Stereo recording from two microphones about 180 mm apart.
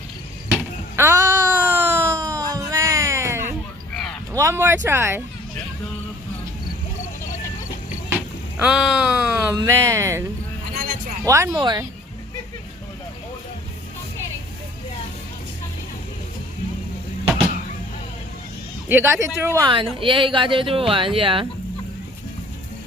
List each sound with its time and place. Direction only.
0.5 s a sound: 15° right (ahead or behind)
4.3 s speech: 15° right (ahead or behind)
8.5 s speech: 5° right (ahead or behind)
9.6 s speech: 15° right (ahead or behind)
11.3 s speech: 15° right (ahead or behind)
18.9 s speech: 15° right (ahead or behind)
19.6 s speech: 30° right (ahead or behind)